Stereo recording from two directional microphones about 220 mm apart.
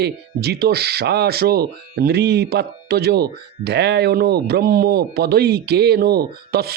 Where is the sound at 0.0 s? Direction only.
45° right (ahead or behind).